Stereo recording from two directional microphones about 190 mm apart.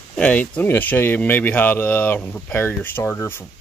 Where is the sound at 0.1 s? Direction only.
10° left (ahead or behind).